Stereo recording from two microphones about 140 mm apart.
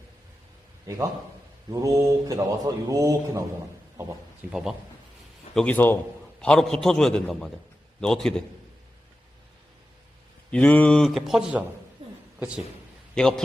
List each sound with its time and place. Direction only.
1.7 s speech: 25° right (ahead or behind)
4.4 s a man's voice: 10° right (ahead or behind)
5.5 s a man's voice: 10° left (ahead or behind)
10.5 s a man's voice: 10° left (ahead or behind)
13.1 s a man's voice: 5° left (ahead or behind)